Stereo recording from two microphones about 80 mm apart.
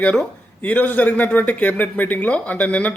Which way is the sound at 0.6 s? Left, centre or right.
Left.